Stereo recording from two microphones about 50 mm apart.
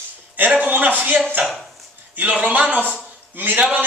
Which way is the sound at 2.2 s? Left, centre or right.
Right.